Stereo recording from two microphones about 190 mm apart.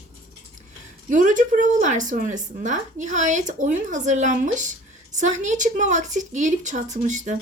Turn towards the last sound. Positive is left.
turn(degrees=-40)  # may be behind; listen again after turning